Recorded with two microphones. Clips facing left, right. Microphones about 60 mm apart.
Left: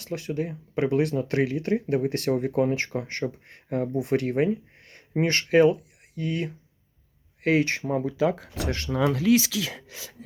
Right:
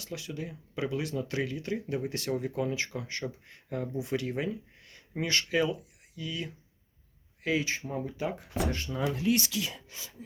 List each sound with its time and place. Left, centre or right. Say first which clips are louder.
0.0 s speech: left 9 dB; left